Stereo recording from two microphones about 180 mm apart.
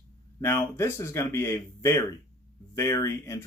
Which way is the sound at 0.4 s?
15° left (ahead or behind).